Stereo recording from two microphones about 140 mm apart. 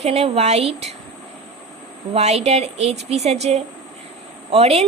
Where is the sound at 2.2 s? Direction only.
50° right (ahead or behind).